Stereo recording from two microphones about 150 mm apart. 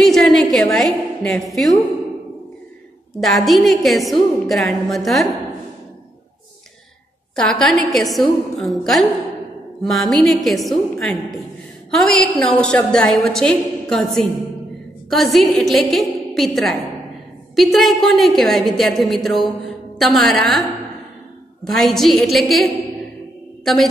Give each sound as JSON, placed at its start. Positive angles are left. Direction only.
{"t": 0.0, "sound": "a woman's voice", "side_deg": 0}
{"t": 3.2, "sound": "a woman's voice", "side_deg": 0}
{"t": 7.3, "sound": "a woman's voice", "side_deg": 5}